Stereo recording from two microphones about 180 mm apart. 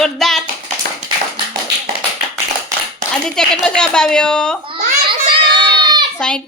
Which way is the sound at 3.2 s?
5° left (ahead or behind).